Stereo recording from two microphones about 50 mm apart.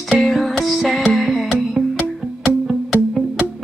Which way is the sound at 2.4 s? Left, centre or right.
Centre.